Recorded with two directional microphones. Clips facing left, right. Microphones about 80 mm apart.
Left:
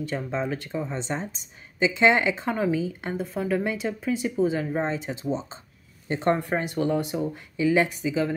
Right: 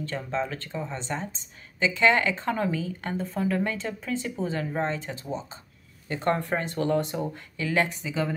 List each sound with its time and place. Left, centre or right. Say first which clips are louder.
0.0 s speech: left 1 dB; centre
6.5 s speech: left 1 dB; centre